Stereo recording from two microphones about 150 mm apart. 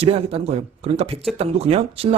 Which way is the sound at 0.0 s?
40° right (ahead or behind).